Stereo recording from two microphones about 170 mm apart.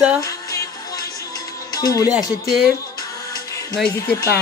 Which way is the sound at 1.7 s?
20° left (ahead or behind).